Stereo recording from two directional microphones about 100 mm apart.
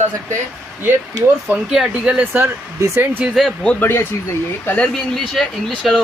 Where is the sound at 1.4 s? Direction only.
10° right (ahead or behind); by 3.1 s 25° right (ahead or behind).